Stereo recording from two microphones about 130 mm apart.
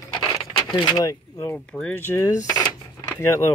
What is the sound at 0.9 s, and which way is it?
Speech, 25° left (ahead or behind).